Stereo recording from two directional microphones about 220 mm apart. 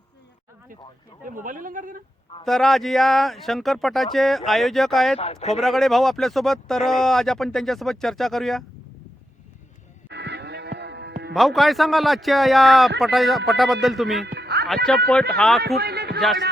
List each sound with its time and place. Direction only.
1.3 s speech: 35° right (ahead or behind)
2.4 s speech: centre (ahead or behind)
5.1 s speech: 30° left (ahead or behind)
5.5 s speech: centre (ahead or behind)
10.1 s livestock: 50° right (ahead or behind)
11.3 s speech: centre (ahead or behind)
14.3 s a sound: 50° right (ahead or behind)
14.8 s speech: 5° left (ahead or behind)
15.6 s a sound: 45° right (ahead or behind)